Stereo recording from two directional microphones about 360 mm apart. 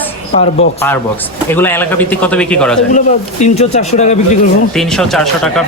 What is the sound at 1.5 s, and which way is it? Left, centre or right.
Speech, centre.